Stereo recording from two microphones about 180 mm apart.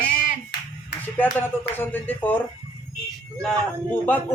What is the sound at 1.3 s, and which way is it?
Speech, 10° left (ahead or behind).